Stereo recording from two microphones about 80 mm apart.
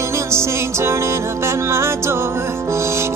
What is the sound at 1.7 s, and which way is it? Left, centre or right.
Music, right.